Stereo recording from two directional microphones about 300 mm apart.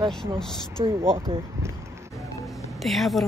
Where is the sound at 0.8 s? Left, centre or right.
Centre.